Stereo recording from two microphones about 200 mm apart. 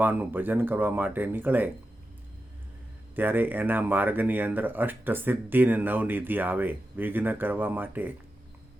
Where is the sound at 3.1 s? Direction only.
10° right (ahead or behind).